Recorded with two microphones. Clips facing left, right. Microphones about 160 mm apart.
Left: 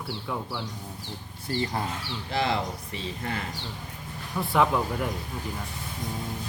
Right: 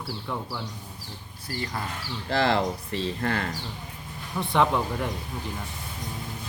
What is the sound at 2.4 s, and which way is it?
Speech, 70° right (ahead or behind).